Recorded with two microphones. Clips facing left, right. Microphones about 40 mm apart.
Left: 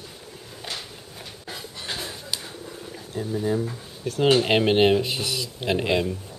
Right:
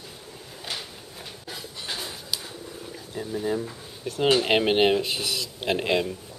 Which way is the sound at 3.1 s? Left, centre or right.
Centre.